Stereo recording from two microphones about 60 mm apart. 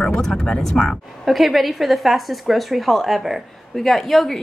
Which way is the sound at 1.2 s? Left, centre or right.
Centre.